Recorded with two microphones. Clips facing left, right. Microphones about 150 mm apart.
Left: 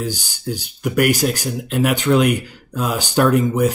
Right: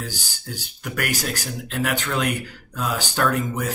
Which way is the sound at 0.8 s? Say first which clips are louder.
Left 10 dB; 15° left (ahead or behind).